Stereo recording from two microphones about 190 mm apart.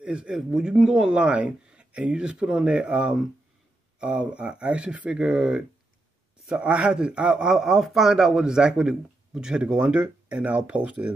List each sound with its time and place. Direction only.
0.0 s speech: 5° right (ahead or behind)